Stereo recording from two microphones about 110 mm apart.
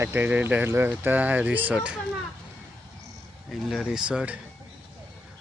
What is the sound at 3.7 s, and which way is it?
Speech, 5° right (ahead or behind).